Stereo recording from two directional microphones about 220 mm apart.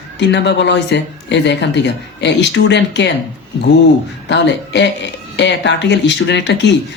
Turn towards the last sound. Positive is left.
turn(degrees=50)  # may be behind; listen again after turning